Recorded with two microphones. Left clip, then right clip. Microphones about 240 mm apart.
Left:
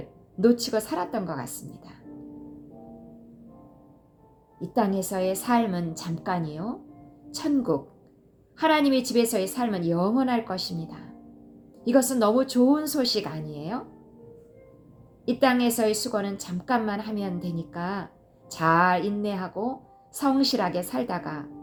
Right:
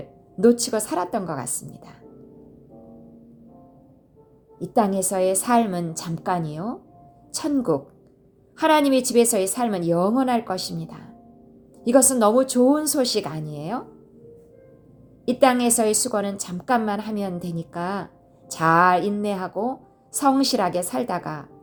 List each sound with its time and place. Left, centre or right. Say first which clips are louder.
0.3 s a woman's voice: right 4 dB; right
4.6 s a woman's voice: right 5 dB; right
15.2 s a woman's voice: right 5 dB; right